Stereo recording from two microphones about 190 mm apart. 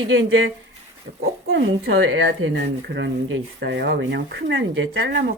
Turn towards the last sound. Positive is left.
turn(degrees=-75)  # may be behind; listen again after turning